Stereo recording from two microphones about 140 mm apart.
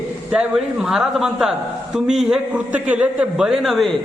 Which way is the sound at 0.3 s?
5° right (ahead or behind).